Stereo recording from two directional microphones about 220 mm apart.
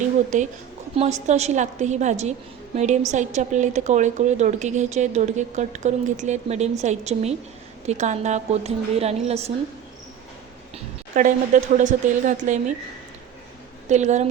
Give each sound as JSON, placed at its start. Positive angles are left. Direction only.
{"t": 0.0, "sound": "a sound", "side_deg": -35}
{"t": 0.9, "sound": "a woman's voice", "side_deg": -30}
{"t": 11.1, "sound": "a woman's voice", "side_deg": -35}
{"t": 13.8, "sound": "a woman's voice", "side_deg": -30}